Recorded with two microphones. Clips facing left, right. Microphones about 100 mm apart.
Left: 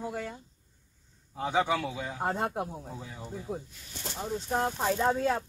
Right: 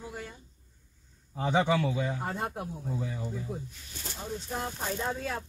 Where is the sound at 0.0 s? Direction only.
75° left (ahead or behind).